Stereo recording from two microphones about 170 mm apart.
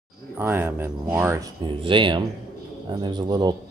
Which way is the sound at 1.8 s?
30° right (ahead or behind).